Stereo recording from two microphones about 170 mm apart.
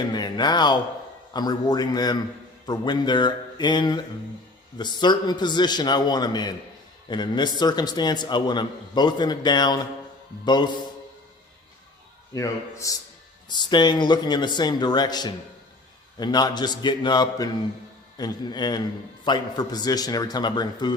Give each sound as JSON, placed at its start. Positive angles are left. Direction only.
{"t": 0.1, "sound": "a man's voice", "side_deg": 25}
{"t": 12.3, "sound": "a man's voice", "side_deg": 20}